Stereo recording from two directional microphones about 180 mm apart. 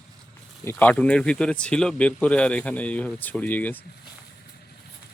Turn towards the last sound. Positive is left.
turn(degrees=10)  # may be behind; listen again after turning